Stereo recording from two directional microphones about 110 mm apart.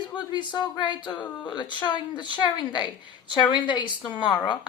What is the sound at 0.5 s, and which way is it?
Female singing, 40° left (ahead or behind).